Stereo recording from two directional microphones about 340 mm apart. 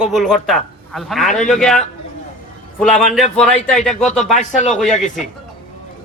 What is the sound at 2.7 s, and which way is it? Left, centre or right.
A man's voice, centre.